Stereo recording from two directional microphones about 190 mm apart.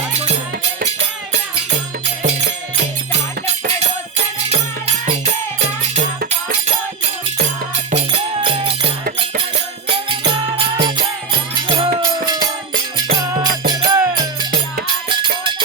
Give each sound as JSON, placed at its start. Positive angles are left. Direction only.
{"t": 0.1, "sound": "music", "side_deg": -35}
{"t": 5.0, "sound": "music", "side_deg": -35}
{"t": 7.9, "sound": "music", "side_deg": -35}
{"t": 9.9, "sound": "music", "side_deg": -25}